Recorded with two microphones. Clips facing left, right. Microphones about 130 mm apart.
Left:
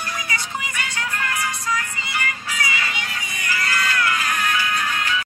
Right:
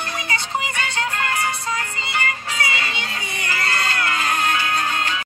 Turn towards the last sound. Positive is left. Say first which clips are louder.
# right 1 dB
turn(degrees=-30)  # may be behind; listen again after turning